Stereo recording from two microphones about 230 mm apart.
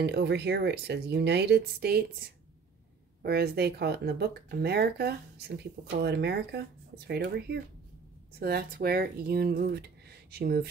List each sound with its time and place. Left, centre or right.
0.0 s speech: right